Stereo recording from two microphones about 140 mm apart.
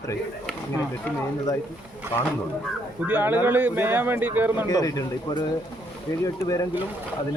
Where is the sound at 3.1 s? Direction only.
10° right (ahead or behind).